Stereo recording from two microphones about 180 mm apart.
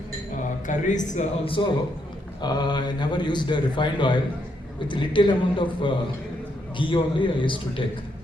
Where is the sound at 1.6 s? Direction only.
25° left (ahead or behind).